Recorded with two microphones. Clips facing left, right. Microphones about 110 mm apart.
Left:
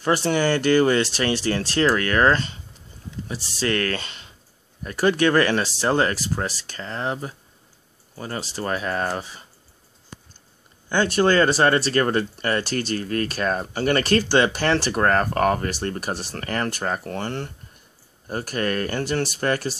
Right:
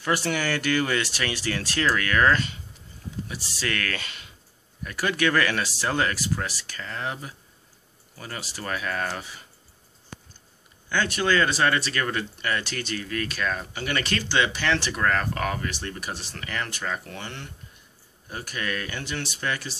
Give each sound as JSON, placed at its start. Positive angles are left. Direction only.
{"t": 0.0, "sound": "speech", "side_deg": 30}
{"t": 10.9, "sound": "speech", "side_deg": 35}